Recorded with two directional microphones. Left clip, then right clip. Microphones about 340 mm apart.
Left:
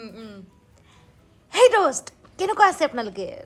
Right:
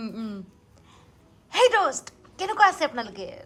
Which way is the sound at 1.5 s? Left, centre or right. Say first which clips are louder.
Left 4 dB; centre.